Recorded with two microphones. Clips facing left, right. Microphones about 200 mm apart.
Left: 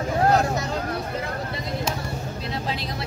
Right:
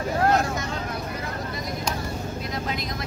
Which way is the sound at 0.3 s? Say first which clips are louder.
Left 2 dB; 35° left (ahead or behind).